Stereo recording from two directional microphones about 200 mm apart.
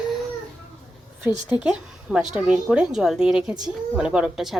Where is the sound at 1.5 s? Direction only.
5° right (ahead or behind).